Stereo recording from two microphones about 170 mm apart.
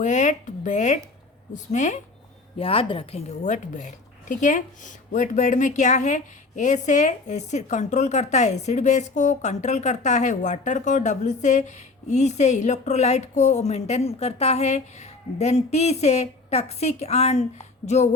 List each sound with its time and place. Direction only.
0.0 s a woman's voice: 45° left (ahead or behind)
2.6 s a woman's voice: 30° left (ahead or behind)
3.4 s a woman's voice: 45° left (ahead or behind)